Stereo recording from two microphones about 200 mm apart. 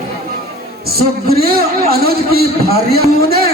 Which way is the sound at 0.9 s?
50° right (ahead or behind).